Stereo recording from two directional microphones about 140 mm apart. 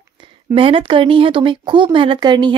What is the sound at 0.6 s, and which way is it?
Speech, 40° right (ahead or behind).